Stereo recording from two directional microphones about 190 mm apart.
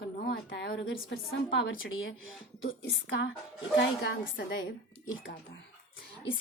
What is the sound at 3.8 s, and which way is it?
Speech, 60° left (ahead or behind).